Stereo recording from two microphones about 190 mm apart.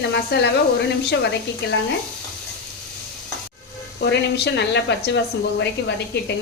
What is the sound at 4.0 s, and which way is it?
Speech, 65° left (ahead or behind).